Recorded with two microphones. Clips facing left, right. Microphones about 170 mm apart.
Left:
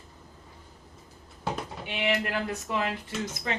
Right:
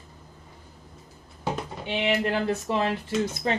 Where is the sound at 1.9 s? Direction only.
25° right (ahead or behind).